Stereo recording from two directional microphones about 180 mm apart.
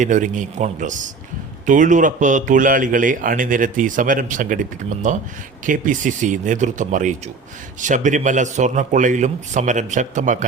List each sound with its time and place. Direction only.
0.0 s a man's voice: 45° right (ahead or behind)